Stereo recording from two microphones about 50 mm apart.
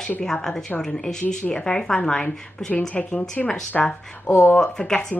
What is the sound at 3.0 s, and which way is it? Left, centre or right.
Speech, left.